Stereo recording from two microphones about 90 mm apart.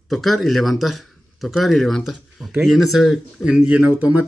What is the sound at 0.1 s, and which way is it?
A man's voice, centre (ahead or behind).